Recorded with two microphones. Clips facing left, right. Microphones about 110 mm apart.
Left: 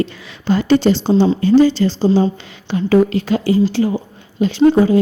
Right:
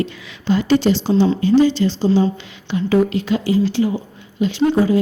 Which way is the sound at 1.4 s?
40° left (ahead or behind).